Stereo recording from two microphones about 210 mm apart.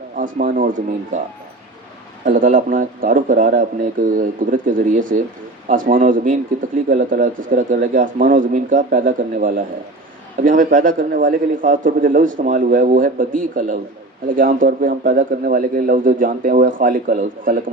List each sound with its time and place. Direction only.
0.2 s a man's voice: 40° right (ahead or behind)
2.3 s a man's voice: 40° right (ahead or behind)